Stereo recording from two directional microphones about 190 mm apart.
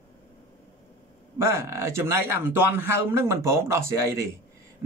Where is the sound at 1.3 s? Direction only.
15° right (ahead or behind).